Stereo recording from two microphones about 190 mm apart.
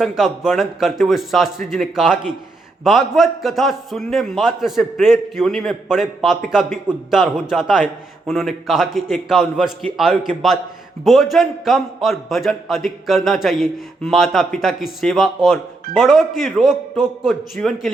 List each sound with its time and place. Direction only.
0.0 s a man's voice: centre (ahead or behind)